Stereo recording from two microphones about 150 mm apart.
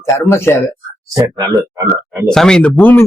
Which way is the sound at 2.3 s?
5° left (ahead or behind).